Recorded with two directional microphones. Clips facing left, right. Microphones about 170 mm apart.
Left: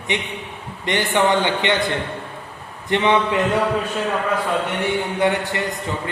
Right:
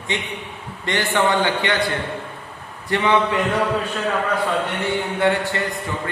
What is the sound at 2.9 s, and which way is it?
Speech, 20° left (ahead or behind).